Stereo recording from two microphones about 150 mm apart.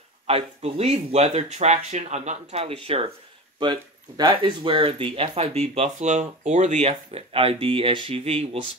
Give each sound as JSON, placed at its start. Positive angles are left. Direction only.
{"t": 0.3, "sound": "speech", "side_deg": -45}